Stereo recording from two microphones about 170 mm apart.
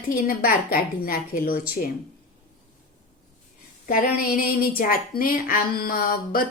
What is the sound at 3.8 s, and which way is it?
A woman's voice, 55° left (ahead or behind).